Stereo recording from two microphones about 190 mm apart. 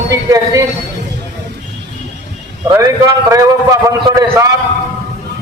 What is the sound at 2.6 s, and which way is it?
A man's voice, 15° right (ahead or behind).